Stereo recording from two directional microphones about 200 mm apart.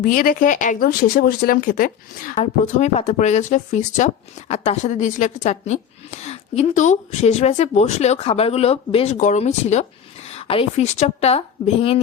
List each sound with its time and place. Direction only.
0.0 s speech: 45° left (ahead or behind)
2.4 s speech: 35° left (ahead or behind)